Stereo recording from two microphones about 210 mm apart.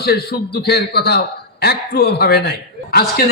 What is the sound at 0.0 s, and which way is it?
A man's voice, 50° left (ahead or behind).